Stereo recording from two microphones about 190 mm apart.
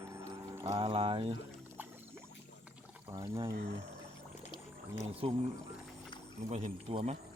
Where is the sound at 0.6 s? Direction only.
30° right (ahead or behind).